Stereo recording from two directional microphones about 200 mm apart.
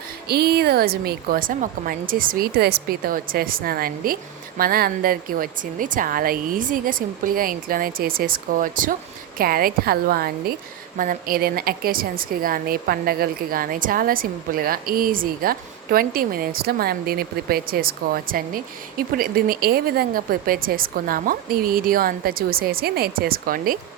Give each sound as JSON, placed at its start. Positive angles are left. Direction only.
{"t": 0.3, "sound": "a woman's voice", "side_deg": -50}